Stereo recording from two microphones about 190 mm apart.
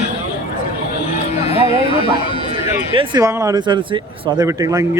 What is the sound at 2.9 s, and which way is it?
Speech, 25° right (ahead or behind).